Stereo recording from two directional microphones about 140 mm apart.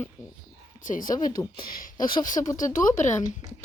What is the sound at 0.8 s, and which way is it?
Speech, 75° left (ahead or behind).